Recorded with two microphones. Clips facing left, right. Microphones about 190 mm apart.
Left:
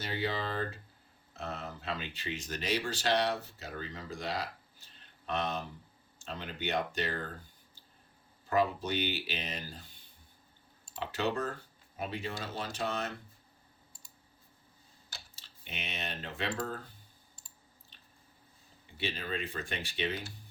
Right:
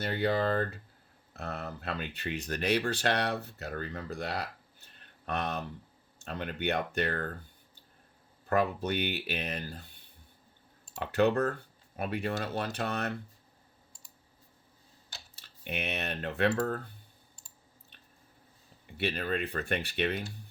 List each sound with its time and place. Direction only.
0.0 s speech: 55° right (ahead or behind)
8.4 s speech: 60° right (ahead or behind)
11.0 s speech: 60° right (ahead or behind)
15.4 s speech: 60° right (ahead or behind)
18.9 s speech: 60° right (ahead or behind)